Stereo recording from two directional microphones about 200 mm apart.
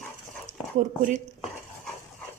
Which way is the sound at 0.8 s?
40° right (ahead or behind).